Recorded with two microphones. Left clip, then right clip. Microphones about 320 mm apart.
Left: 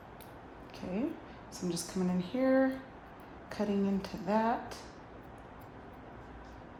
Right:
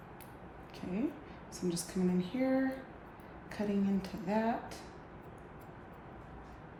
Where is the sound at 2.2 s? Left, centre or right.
Centre.